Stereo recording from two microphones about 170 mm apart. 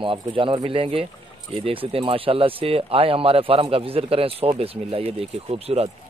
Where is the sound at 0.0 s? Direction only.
30° right (ahead or behind).